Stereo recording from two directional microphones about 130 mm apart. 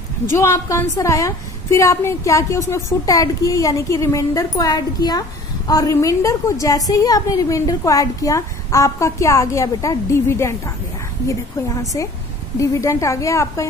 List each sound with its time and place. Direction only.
0.4 s a woman's voice: 20° left (ahead or behind)